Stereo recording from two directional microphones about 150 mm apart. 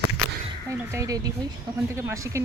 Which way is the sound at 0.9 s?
20° right (ahead or behind).